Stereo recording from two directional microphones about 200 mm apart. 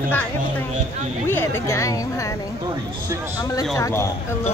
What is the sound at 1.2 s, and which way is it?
Speech, 10° left (ahead or behind).